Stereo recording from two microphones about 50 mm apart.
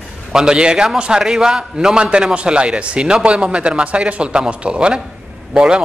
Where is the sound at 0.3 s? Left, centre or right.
Centre.